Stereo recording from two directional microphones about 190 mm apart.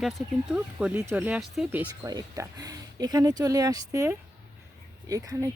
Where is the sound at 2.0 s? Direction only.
20° right (ahead or behind).